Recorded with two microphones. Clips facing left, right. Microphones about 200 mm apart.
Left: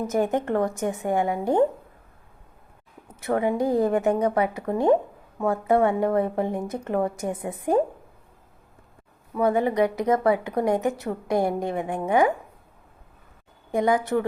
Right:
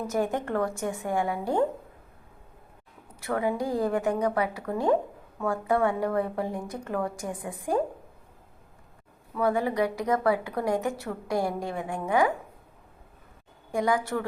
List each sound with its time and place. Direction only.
0.0 s speech: 20° left (ahead or behind)
3.2 s speech: 20° left (ahead or behind)
9.3 s speech: 20° left (ahead or behind)
13.7 s speech: 20° left (ahead or behind)